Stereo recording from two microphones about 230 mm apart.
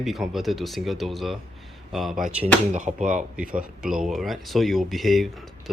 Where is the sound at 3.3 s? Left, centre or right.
Centre.